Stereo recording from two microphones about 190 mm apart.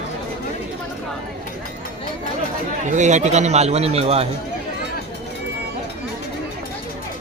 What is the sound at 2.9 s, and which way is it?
A man's voice, 40° right (ahead or behind).